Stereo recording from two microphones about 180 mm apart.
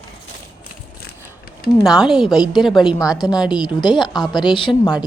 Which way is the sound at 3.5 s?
25° left (ahead or behind).